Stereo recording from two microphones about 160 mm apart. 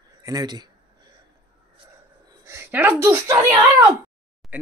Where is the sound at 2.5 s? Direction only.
15° right (ahead or behind).